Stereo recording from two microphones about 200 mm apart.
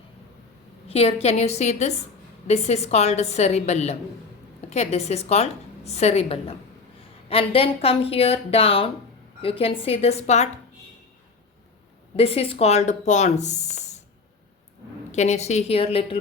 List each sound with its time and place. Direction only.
0.9 s a woman's voice: 30° left (ahead or behind)
12.1 s a woman's voice: 30° left (ahead or behind)
15.1 s a woman's voice: 35° left (ahead or behind)